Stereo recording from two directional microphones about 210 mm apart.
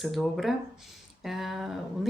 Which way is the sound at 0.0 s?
Centre (ahead or behind).